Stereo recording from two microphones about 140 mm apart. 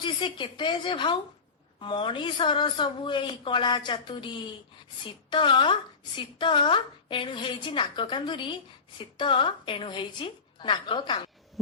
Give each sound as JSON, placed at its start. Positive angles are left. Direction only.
{"t": 0.0, "sound": "speech", "side_deg": 35}